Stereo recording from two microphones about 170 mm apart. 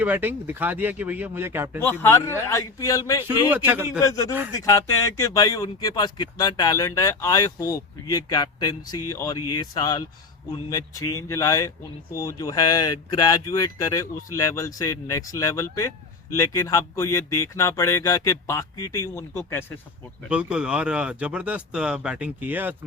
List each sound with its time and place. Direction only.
0.0 s speech: 10° right (ahead or behind)
1.8 s speech: 10° left (ahead or behind)
3.2 s speech: 10° right (ahead or behind)
4.0 s speech: 20° left (ahead or behind)
20.3 s speech: 5° right (ahead or behind)